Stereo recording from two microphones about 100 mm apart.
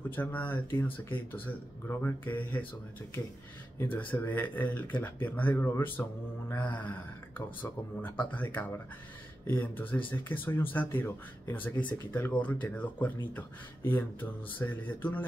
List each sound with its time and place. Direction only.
0.1 s speech: 15° left (ahead or behind)
3.8 s speech: 20° left (ahead or behind)